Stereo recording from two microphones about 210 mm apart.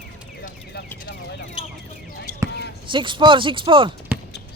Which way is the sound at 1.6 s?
25° left (ahead or behind).